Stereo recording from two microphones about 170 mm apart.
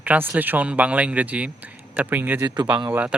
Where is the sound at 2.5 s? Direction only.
25° right (ahead or behind).